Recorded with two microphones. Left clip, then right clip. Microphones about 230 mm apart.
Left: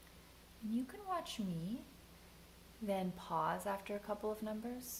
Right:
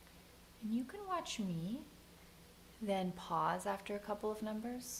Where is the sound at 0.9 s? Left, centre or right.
Right.